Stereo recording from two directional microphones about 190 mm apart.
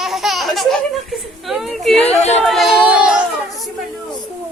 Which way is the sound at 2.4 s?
Centre (ahead or behind).